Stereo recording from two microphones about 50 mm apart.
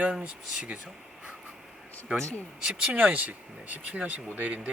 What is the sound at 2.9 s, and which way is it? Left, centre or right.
Speech, right.